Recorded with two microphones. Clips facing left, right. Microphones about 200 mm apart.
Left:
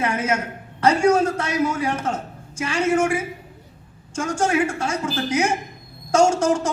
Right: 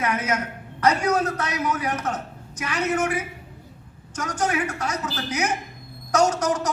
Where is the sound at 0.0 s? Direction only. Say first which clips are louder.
Left 2 dB; 30° left (ahead or behind).